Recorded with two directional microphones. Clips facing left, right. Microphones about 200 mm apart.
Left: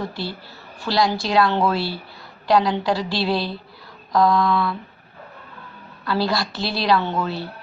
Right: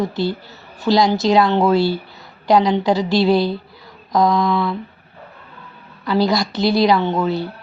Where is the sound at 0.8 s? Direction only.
20° right (ahead or behind).